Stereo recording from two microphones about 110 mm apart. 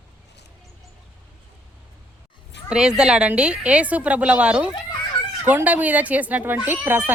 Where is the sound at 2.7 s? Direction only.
5° right (ahead or behind).